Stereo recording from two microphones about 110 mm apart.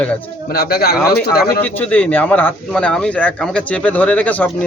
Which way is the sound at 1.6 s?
15° left (ahead or behind).